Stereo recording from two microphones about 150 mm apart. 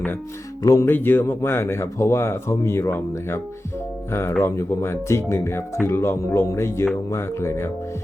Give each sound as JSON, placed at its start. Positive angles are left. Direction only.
{"t": 0.6, "sound": "speech", "side_deg": 20}